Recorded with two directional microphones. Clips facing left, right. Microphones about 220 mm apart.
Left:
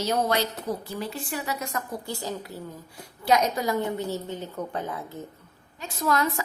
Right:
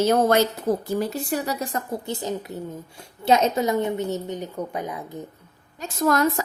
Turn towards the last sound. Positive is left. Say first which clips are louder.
# right 5 dB
turn(degrees=-45)  # may be behind; listen again after turning